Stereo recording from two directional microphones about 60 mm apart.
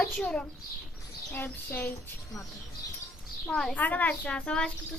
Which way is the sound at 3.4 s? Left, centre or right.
Centre.